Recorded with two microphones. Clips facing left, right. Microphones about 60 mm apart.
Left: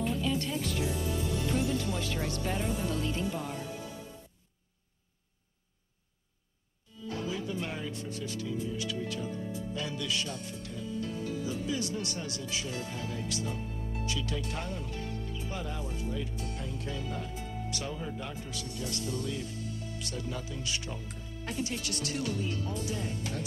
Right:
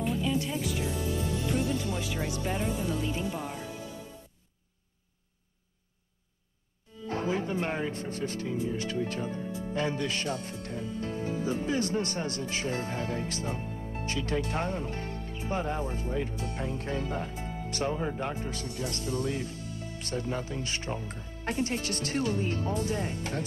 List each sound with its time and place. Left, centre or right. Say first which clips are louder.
0.0 s music: right 2 dB; centre
1.9 s speech: right 1 dB; centre
7.1 s speech: right 5 dB; right